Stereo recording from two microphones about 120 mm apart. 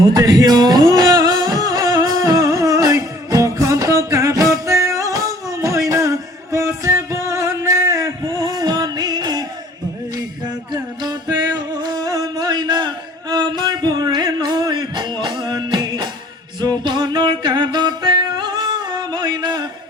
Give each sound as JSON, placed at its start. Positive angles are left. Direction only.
{"t": 0.1, "sound": "music", "side_deg": -30}
{"t": 10.7, "sound": "music", "side_deg": -35}